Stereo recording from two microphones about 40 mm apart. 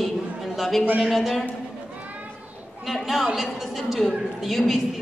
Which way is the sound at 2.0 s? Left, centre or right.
Right.